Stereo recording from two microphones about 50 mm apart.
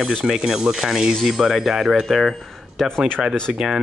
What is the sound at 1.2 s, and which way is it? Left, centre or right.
Speech, centre.